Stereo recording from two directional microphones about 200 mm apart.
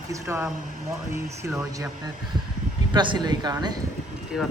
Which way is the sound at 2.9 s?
20° right (ahead or behind).